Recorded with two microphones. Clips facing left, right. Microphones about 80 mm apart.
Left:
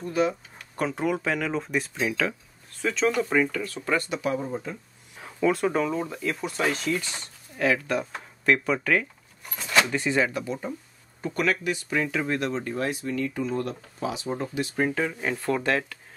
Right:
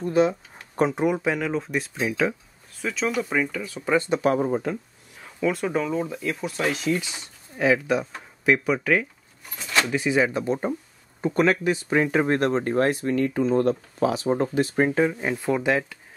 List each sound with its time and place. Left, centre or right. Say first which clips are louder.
0.0 s speech: right 4 dB; right; by 4.0 s centre
4.3 s speech: right 6 dB; right
5.2 s speech: left 1 dB; centre
10.3 s speech: right 6 dB; right
13.4 s speech: right 8 dB; right
13.9 s speech: right 4 dB; right; by 16.0 s centre